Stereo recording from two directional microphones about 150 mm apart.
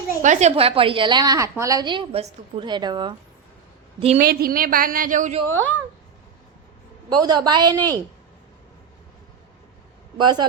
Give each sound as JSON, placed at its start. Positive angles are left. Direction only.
{"t": 0.2, "sound": "a woman's voice", "side_deg": -50}
{"t": 4.2, "sound": "a woman's voice", "side_deg": -85}
{"t": 5.5, "sound": "speech", "side_deg": 15}
{"t": 7.1, "sound": "a woman's voice", "side_deg": -30}
{"t": 10.2, "sound": "a woman's voice", "side_deg": -30}